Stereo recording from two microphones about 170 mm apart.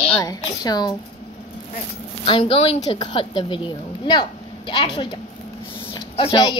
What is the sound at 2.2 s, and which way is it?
A woman's voice, 30° left (ahead or behind).